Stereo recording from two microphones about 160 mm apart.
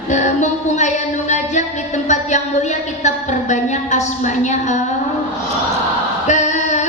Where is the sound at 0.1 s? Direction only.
50° left (ahead or behind).